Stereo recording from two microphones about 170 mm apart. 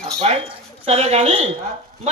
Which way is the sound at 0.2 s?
35° right (ahead or behind).